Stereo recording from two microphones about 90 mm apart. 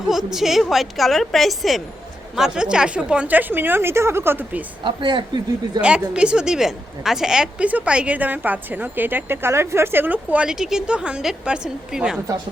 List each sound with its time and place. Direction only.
0.1 s a woman's voice: 5° right (ahead or behind); by 4.6 s 25° right (ahead or behind)
4.8 s speech: 65° right (ahead or behind)
5.8 s a woman's voice: 10° right (ahead or behind)